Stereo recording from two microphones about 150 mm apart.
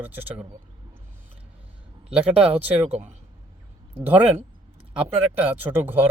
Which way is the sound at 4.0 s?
10° right (ahead or behind).